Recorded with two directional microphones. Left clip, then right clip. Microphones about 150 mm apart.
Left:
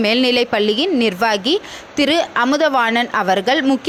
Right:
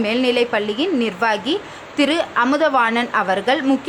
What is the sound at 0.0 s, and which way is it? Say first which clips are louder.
A woman's voice: left 2 dB; 35° left (ahead or behind).